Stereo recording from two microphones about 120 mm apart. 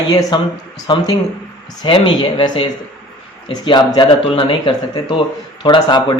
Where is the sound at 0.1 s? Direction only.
35° left (ahead or behind).